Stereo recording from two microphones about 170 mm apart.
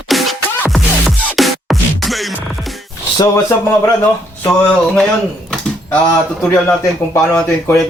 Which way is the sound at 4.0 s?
10° left (ahead or behind).